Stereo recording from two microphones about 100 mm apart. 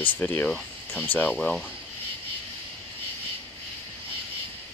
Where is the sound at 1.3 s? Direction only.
5° left (ahead or behind).